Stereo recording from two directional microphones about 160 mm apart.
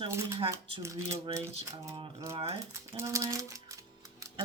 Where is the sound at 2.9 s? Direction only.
20° right (ahead or behind).